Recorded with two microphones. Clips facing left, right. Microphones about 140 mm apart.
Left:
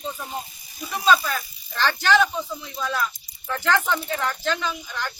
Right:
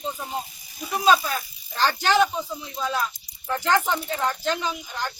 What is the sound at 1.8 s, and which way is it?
Speech, 35° right (ahead or behind).